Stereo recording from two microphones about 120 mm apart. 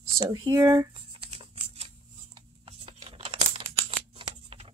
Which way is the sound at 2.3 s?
50° right (ahead or behind).